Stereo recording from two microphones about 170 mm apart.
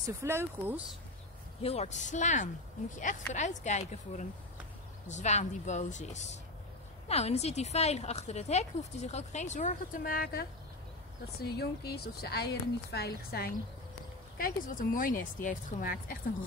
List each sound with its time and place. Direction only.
0.0 s speech: 15° right (ahead or behind)
1.6 s a woman's voice: 40° left (ahead or behind); by 10.4 s 60° left (ahead or behind)
11.5 s speech: 70° left (ahead or behind)
14.4 s speech: 55° left (ahead or behind)